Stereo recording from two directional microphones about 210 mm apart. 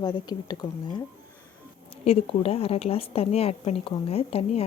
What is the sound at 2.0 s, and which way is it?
A woman's voice, 30° left (ahead or behind).